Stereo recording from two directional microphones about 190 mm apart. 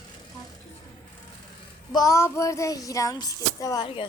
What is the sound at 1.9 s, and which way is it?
Child singing, 20° left (ahead or behind).